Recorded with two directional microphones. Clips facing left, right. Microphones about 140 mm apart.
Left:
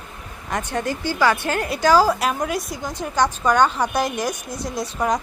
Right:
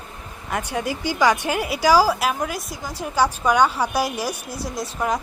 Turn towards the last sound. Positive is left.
turn(degrees=-5)  # may be behind; listen again after turning